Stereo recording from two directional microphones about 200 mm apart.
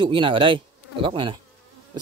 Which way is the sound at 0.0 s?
25° right (ahead or behind).